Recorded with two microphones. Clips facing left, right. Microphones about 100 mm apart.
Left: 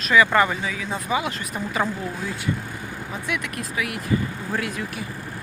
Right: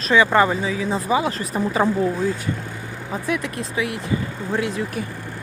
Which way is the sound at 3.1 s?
30° right (ahead or behind).